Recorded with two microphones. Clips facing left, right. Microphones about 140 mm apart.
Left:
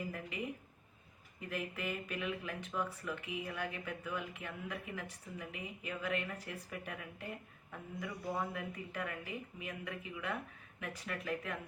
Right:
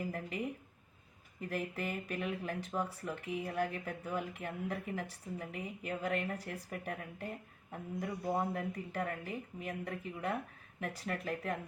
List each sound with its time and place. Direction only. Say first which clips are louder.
1.4 s speech: right 3 dB; 40° right (ahead or behind)
8.3 s speech: right 4 dB; 25° right (ahead or behind)
8.5 s speech: right 4 dB; 40° right (ahead or behind)